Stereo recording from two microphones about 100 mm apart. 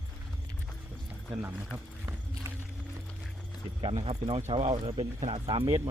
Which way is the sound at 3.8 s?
90° right.